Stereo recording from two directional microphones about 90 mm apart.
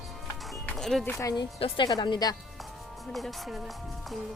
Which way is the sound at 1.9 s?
55° left (ahead or behind).